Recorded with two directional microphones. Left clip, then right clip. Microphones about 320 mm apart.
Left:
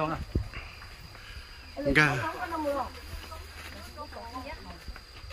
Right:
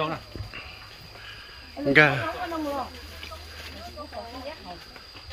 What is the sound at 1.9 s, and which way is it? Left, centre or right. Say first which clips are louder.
Speech: right 6 dB; centre.